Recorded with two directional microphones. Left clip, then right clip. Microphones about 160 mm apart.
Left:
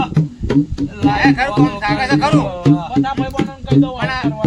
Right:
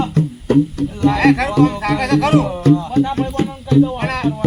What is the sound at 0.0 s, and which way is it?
Speech, 5° left (ahead or behind).